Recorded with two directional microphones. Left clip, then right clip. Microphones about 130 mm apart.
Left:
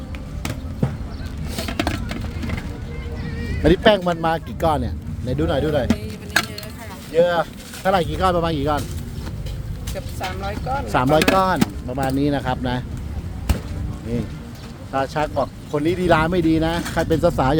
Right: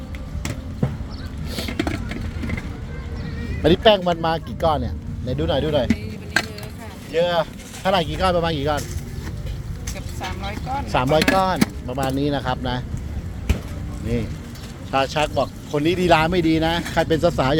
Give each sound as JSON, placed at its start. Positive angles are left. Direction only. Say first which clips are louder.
{"t": 1.5, "sound": "music", "louder": "left 1 dB", "side_deg": 5}
{"t": 3.6, "sound": "speech", "louder": "even", "side_deg": 35}
{"t": 7.1, "sound": "speech", "louder": "left 2 dB", "side_deg": 20}
{"t": 10.4, "sound": "speech", "louder": "left 2 dB", "side_deg": 35}
{"t": 11.9, "sound": "speech", "louder": "left 3 dB", "side_deg": 20}
{"t": 14.9, "sound": "speech", "louder": "right 2 dB", "side_deg": 0}
{"t": 15.4, "sound": "speech", "louder": "even", "side_deg": 15}
{"t": 17.2, "sound": "speech", "louder": "left 1 dB", "side_deg": 20}